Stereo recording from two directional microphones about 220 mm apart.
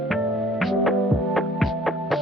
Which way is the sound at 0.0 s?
Centre (ahead or behind).